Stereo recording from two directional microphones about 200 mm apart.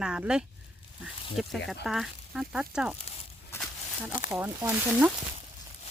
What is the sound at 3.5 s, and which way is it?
Walk, 5° left (ahead or behind).